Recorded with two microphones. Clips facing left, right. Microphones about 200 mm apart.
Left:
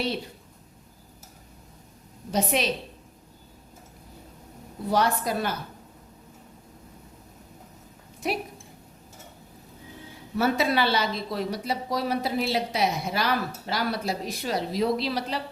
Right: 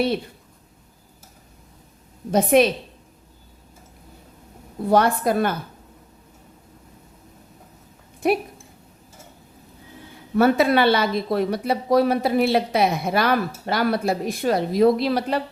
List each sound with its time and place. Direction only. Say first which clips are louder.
2.3 s speech: right 9 dB; 55° right (ahead or behind)
4.9 s speech: right 6 dB; 55° right (ahead or behind)
8.2 s speech: right 9 dB; 55° right (ahead or behind)
10.3 s speech: right 7 dB; 55° right (ahead or behind)